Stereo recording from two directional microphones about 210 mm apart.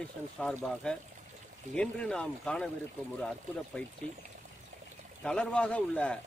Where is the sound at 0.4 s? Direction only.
5° left (ahead or behind).